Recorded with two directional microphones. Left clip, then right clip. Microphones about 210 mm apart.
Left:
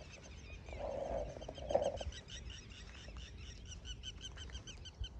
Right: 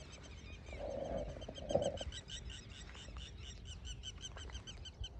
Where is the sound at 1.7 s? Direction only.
40° right (ahead or behind).